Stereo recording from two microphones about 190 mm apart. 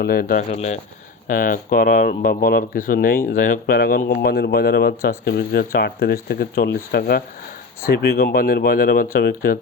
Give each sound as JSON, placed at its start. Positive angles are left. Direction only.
{"t": 0.0, "sound": "speech", "side_deg": 55}
{"t": 0.5, "sound": "speech", "side_deg": 35}
{"t": 1.3, "sound": "speech", "side_deg": 45}